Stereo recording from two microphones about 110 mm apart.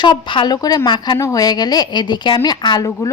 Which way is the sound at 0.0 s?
45° left (ahead or behind).